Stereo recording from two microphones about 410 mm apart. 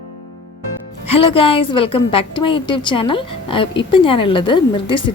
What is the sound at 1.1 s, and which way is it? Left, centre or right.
Speech, left.